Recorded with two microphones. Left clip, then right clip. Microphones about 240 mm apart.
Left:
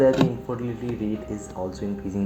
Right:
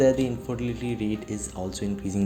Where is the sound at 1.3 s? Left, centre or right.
Right.